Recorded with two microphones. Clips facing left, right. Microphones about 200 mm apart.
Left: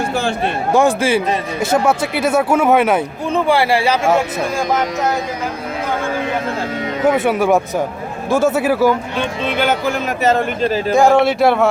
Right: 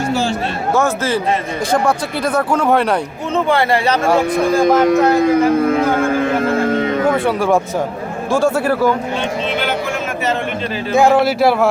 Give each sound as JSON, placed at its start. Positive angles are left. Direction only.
{"t": 0.1, "sound": "a sound", "side_deg": 55}
{"t": 0.7, "sound": "speech", "side_deg": 15}
{"t": 4.8, "sound": "speech", "side_deg": -55}
{"t": 6.4, "sound": "a sound", "side_deg": -55}
{"t": 7.3, "sound": "speech", "side_deg": 5}
{"t": 10.9, "sound": "speech", "side_deg": 0}